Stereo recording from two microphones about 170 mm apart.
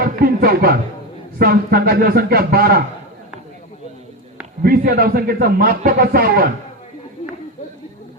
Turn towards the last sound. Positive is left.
turn(degrees=-60)  # may be behind; listen again after turning